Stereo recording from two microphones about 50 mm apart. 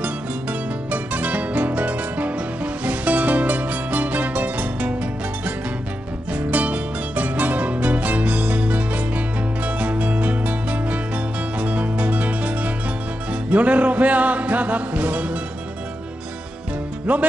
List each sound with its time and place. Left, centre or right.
0.0 s music: right
6.3 s music: right
17.1 s music: right